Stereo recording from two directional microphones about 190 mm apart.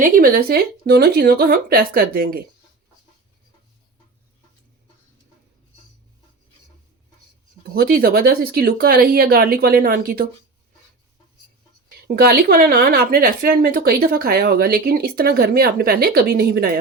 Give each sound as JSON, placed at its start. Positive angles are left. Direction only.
{"t": 0.0, "sound": "speech", "side_deg": -50}
{"t": 7.7, "sound": "speech", "side_deg": -50}
{"t": 12.0, "sound": "speech", "side_deg": -55}